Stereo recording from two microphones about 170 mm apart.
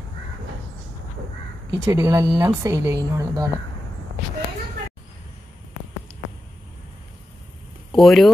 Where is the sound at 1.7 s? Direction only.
15° right (ahead or behind).